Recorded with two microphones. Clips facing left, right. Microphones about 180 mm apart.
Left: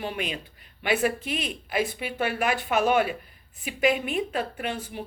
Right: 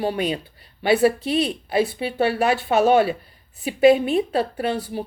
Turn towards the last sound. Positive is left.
turn(degrees=-35)  # may be behind; listen again after turning